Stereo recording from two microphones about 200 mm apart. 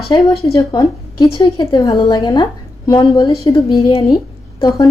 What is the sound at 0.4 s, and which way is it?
A woman's voice, 15° left (ahead or behind).